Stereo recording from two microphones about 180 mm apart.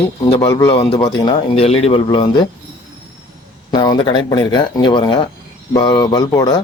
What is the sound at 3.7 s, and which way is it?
Speech, 25° left (ahead or behind).